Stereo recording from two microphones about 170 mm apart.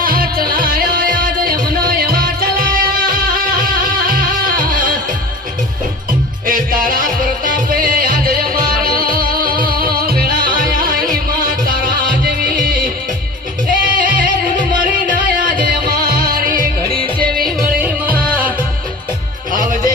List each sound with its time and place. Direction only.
0.0 s music: 60° right (ahead or behind)
6.4 s music: 55° right (ahead or behind)
17.3 s music: centre (ahead or behind)